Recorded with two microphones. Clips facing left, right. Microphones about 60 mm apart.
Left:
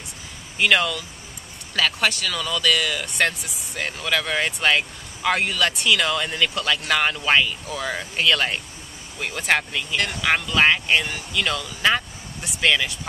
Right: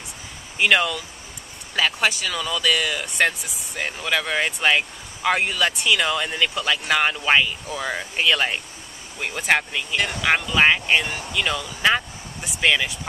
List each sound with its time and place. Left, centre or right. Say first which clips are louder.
0.6 s speech: right 1 dB; centre